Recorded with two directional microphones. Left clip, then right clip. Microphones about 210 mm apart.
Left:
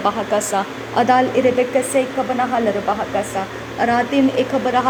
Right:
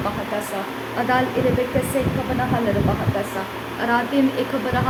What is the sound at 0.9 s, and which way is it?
Speech, 30° left (ahead or behind).